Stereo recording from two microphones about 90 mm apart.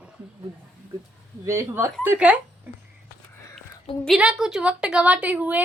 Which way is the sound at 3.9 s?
80° left.